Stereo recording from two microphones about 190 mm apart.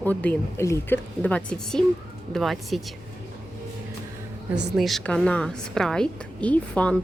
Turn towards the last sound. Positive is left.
turn(degrees=5)  # may be behind; listen again after turning